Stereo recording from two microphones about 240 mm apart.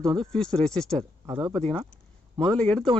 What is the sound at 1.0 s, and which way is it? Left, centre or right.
Speech, centre.